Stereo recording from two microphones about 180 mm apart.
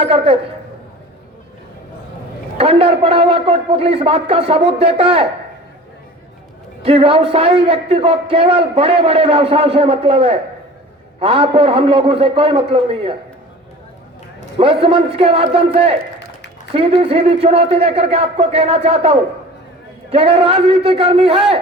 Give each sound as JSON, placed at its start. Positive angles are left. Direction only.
{"t": 0.0, "sound": "a woman's voice", "side_deg": -30}
{"t": 2.6, "sound": "a man's voice", "side_deg": -30}
{"t": 6.8, "sound": "a man's voice", "side_deg": -30}
{"t": 14.6, "sound": "a man's voice", "side_deg": -30}